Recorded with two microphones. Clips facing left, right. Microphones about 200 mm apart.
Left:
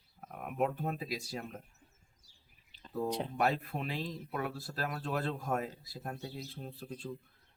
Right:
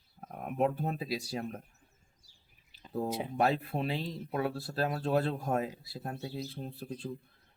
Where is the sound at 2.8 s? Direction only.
5° right (ahead or behind).